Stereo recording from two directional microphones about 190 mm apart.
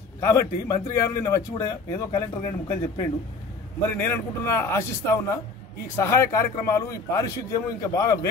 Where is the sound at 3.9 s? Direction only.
10° left (ahead or behind).